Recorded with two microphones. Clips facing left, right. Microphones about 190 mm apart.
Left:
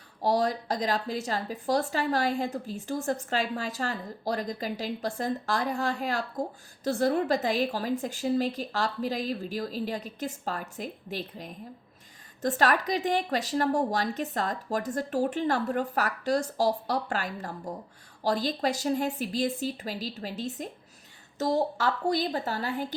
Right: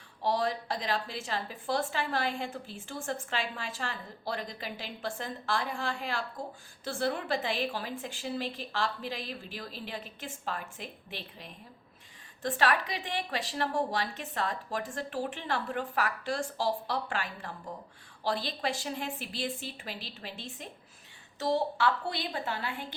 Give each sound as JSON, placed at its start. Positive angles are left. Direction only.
{"t": 0.2, "sound": "a woman's voice", "side_deg": 40}